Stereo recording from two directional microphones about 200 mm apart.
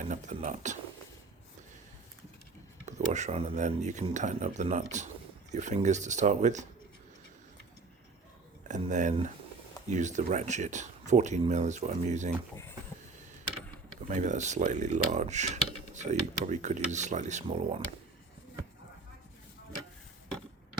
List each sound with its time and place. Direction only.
0.0 s speech: 40° right (ahead or behind)
2.8 s speech: 35° right (ahead or behind)
8.6 s speech: 40° right (ahead or behind)
14.1 s speech: 35° right (ahead or behind)